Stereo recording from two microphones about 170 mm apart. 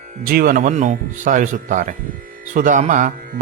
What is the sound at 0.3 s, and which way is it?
A man's voice, 60° right (ahead or behind).